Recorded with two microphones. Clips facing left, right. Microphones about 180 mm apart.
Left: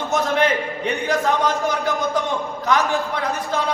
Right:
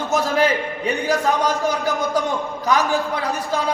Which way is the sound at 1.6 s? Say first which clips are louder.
Right 1 dB; 20° left (ahead or behind).